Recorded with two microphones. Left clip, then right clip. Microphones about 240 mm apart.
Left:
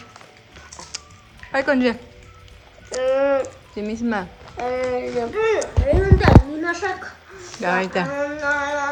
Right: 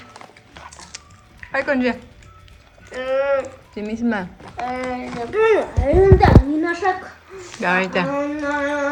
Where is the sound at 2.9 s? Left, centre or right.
Centre.